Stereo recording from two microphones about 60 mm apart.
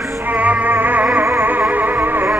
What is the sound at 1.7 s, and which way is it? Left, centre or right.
Music, right.